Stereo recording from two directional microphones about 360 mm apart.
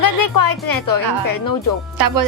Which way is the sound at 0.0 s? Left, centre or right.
Left.